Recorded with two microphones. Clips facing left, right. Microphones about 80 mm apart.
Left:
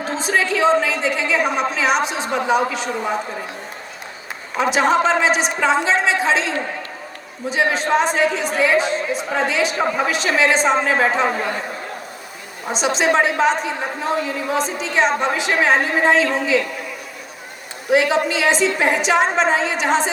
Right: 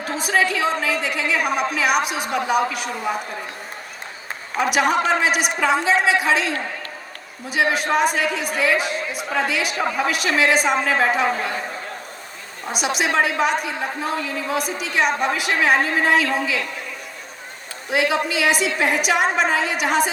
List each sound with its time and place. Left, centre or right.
0.0 s a woman's voice: left
4.6 s a woman's voice: left
7.5 s a woman's voice: left
12.7 s a woman's voice: left
17.9 s a woman's voice: left